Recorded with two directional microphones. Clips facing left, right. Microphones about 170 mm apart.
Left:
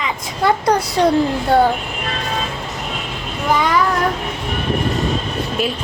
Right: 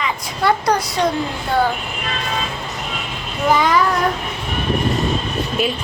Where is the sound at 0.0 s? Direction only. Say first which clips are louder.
Left 1 dB; 25° left (ahead or behind).